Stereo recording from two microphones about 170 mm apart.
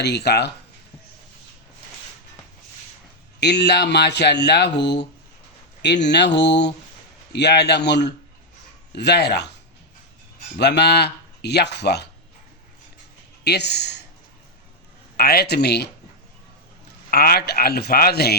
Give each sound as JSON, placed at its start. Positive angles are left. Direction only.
{"t": 0.0, "sound": "speech", "side_deg": 75}
{"t": 3.4, "sound": "speech", "side_deg": 80}
{"t": 8.9, "sound": "speech", "side_deg": 80}
{"t": 10.6, "sound": "speech", "side_deg": 80}
{"t": 13.4, "sound": "speech", "side_deg": 80}
{"t": 15.1, "sound": "speech", "side_deg": 65}
{"t": 17.1, "sound": "speech", "side_deg": 60}